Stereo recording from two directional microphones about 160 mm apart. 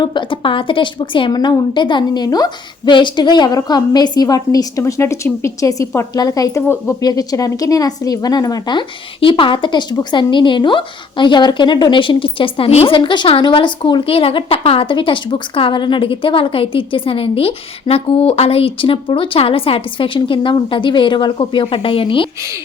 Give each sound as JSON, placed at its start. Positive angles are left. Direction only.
{"t": 0.0, "sound": "a woman's voice", "side_deg": 30}